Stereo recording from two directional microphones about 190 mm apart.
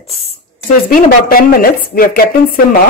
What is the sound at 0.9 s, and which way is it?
A woman's voice, 50° left (ahead or behind).